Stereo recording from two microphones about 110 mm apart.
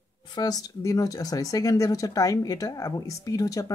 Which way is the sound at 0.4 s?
35° left (ahead or behind).